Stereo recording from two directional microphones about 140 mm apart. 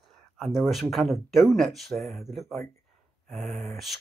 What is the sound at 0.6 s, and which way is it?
Speech, centre (ahead or behind).